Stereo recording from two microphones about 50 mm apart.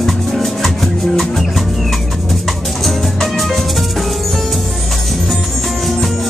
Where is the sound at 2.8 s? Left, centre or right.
Centre.